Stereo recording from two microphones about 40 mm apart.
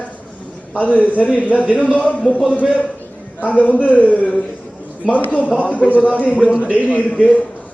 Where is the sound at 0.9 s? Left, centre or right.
Left.